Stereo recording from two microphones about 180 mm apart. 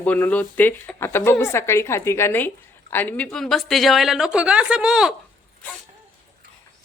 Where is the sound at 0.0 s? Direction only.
10° left (ahead or behind).